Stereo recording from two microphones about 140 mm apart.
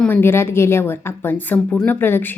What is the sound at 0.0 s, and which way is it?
A woman's voice, 15° left (ahead or behind).